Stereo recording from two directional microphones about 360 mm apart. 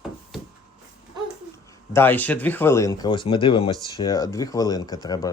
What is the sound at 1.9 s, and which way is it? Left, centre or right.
Speech, centre.